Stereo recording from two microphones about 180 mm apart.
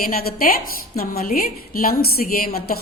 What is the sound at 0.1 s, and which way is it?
A woman's voice, 55° left (ahead or behind).